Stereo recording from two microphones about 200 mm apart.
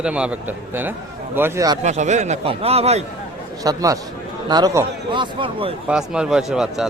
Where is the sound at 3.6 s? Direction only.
15° right (ahead or behind).